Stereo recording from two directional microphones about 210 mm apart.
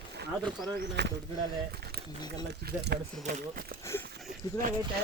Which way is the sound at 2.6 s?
50° right (ahead or behind).